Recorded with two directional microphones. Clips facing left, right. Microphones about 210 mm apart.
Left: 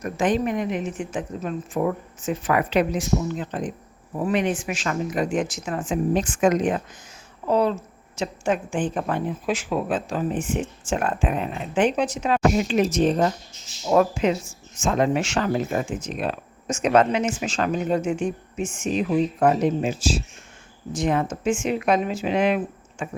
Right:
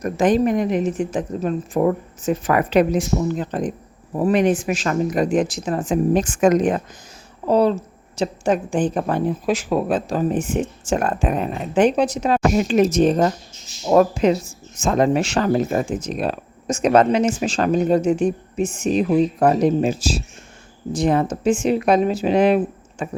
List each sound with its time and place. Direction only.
0.0 s speech: 40° right (ahead or behind)